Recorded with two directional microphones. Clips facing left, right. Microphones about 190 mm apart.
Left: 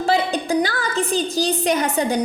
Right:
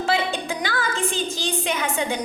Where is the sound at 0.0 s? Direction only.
35° left (ahead or behind).